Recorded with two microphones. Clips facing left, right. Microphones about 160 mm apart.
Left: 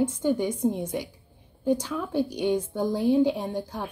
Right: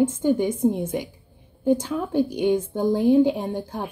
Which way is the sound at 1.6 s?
50° right (ahead or behind).